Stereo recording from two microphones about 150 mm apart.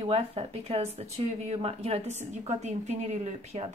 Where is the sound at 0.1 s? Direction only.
40° right (ahead or behind).